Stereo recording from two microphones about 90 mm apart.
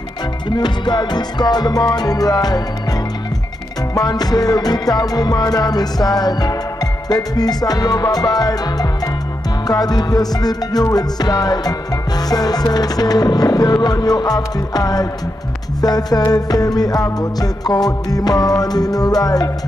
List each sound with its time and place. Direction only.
0.5 s music: 55° left (ahead or behind)
3.9 s music: 45° left (ahead or behind)